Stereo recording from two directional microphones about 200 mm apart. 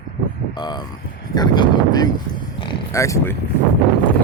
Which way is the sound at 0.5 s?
20° left (ahead or behind).